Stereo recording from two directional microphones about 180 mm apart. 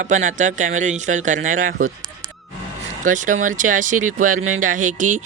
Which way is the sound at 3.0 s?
45° right (ahead or behind).